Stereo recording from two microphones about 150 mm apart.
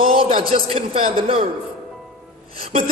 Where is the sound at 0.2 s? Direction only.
40° right (ahead or behind).